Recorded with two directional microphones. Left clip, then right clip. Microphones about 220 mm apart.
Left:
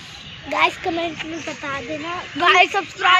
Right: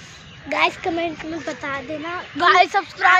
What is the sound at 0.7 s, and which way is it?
Speech, centre (ahead or behind).